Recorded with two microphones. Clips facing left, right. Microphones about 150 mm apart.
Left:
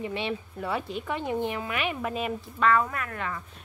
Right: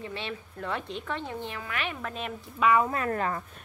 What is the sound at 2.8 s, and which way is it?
Speech, 30° right (ahead or behind).